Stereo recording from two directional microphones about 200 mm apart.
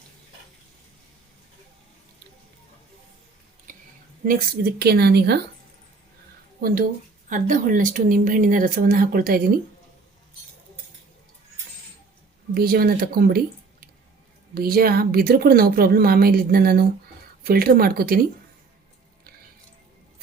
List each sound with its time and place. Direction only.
4.3 s a woman's voice: 50° right (ahead or behind)
6.6 s a woman's voice: 45° right (ahead or behind)
12.5 s a woman's voice: 50° right (ahead or behind)
14.5 s a woman's voice: 50° right (ahead or behind)